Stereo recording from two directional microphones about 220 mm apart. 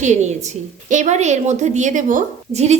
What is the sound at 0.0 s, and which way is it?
A woman's voice, 30° right (ahead or behind).